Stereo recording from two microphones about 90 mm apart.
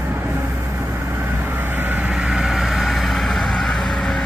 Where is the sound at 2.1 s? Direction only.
5° right (ahead or behind).